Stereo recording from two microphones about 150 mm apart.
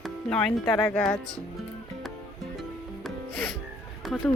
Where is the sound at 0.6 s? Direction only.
30° left (ahead or behind).